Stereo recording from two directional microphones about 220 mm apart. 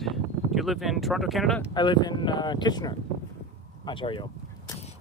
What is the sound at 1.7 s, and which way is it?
Speech, 20° left (ahead or behind).